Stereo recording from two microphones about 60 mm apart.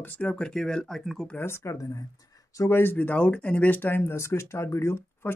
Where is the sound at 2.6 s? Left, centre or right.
Left.